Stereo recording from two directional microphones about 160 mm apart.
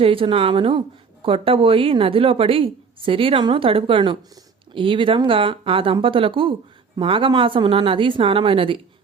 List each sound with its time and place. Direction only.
0.0 s speech: 35° right (ahead or behind)